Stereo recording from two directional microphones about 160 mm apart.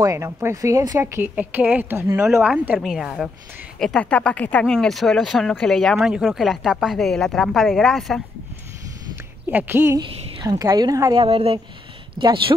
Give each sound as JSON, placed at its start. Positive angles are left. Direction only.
{"t": 0.0, "sound": "a woman's voice", "side_deg": -20}
{"t": 9.5, "sound": "a woman's voice", "side_deg": -15}
{"t": 11.2, "sound": "speech", "side_deg": -35}